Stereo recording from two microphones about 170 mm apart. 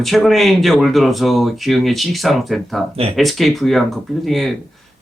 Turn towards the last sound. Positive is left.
turn(degrees=0)  # may be behind; listen again after turning